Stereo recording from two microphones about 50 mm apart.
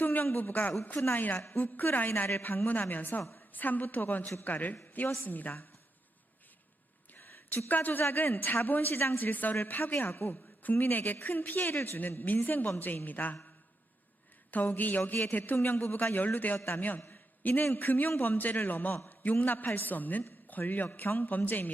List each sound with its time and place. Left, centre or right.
0.0 s a man's voice: left
7.1 s a sound: left
7.7 s a woman's voice: left
14.5 s a woman's voice: left